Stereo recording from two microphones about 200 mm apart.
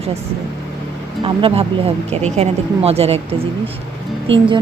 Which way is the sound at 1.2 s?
25° right (ahead or behind).